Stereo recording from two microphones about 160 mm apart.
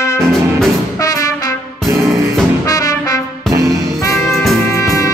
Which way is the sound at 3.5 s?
20° right (ahead or behind).